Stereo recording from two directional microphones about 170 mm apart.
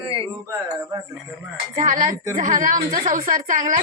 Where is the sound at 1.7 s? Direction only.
50° right (ahead or behind).